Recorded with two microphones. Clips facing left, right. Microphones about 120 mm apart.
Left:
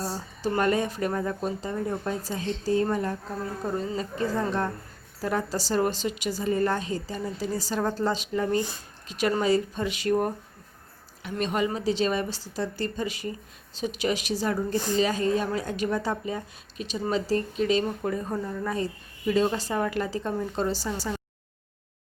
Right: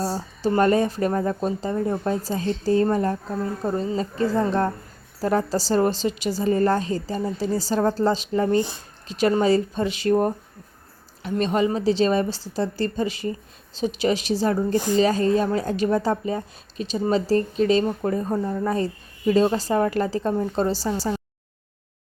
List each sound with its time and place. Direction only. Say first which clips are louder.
0.0 s a woman's voice: right 6 dB; 30° right (ahead or behind)